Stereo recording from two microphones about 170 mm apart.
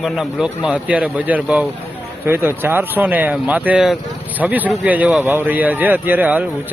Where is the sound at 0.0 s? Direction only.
5° right (ahead or behind).